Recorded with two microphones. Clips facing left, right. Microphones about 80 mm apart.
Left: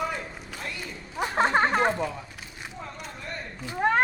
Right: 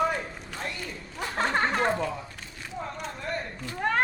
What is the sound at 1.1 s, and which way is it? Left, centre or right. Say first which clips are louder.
Speech: left 4 dB; left.